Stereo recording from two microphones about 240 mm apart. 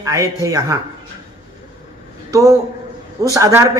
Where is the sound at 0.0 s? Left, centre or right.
Centre.